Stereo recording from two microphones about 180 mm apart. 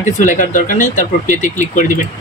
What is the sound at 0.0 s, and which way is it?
Speech, 45° left (ahead or behind).